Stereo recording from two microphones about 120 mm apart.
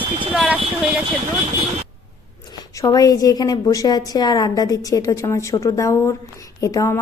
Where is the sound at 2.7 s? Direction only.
30° left (ahead or behind).